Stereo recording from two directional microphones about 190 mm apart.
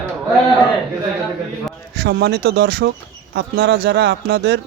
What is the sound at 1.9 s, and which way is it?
A man's voice, 60° right (ahead or behind).